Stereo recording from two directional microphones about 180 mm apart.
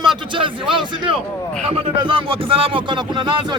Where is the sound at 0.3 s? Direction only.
30° right (ahead or behind).